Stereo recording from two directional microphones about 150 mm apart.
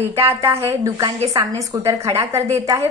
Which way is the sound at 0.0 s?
15° right (ahead or behind).